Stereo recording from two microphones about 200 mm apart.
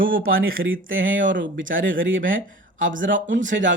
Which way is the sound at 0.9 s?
70° right (ahead or behind).